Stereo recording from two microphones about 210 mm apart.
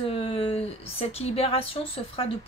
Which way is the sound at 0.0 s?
25° left (ahead or behind).